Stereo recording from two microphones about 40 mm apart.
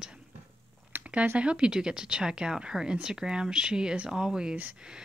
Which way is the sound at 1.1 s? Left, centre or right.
Right.